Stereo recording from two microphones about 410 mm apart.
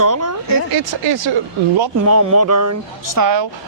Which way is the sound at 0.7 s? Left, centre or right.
Right.